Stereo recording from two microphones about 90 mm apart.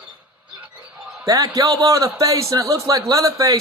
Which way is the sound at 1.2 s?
40° right (ahead or behind).